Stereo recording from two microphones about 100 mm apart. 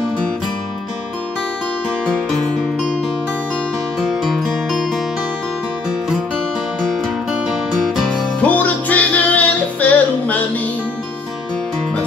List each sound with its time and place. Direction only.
4.0 s music: 5° right (ahead or behind)
7.4 s music: 5° right (ahead or behind)
8.4 s music: 15° left (ahead or behind)